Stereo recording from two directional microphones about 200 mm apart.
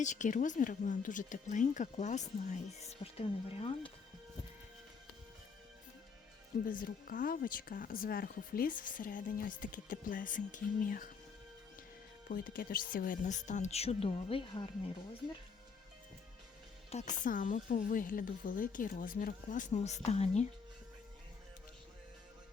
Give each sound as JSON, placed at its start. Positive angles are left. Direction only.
{"t": 0.0, "sound": "speech", "side_deg": 40}
{"t": 6.7, "sound": "speech", "side_deg": 45}
{"t": 12.3, "sound": "speech", "side_deg": 45}
{"t": 16.9, "sound": "speech", "side_deg": 35}